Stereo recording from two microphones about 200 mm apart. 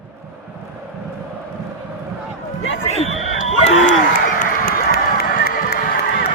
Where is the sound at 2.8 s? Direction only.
35° left (ahead or behind); by 5.7 s 50° left (ahead or behind).